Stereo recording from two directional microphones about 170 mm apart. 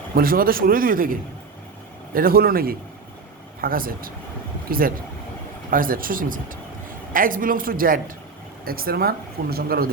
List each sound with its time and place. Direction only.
0.2 s speech: 60° right (ahead or behind)